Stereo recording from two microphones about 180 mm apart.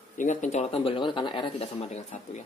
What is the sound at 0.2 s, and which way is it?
Speech, 40° left (ahead or behind).